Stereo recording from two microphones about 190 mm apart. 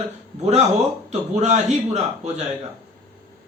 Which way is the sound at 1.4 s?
40° right (ahead or behind).